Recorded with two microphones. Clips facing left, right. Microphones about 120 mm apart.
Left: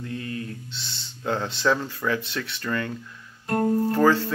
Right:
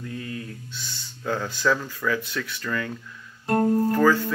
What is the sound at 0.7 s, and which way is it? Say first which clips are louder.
Speech: even; 25° left (ahead or behind).